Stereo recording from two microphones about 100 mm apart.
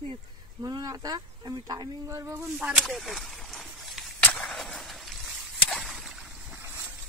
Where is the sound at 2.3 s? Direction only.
20° right (ahead or behind).